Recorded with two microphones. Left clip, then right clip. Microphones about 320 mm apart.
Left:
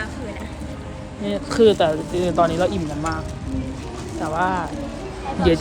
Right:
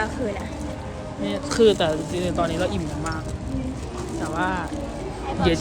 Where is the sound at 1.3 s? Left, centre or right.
Centre.